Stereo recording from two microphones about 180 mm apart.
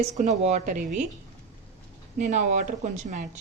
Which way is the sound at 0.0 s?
40° right (ahead or behind).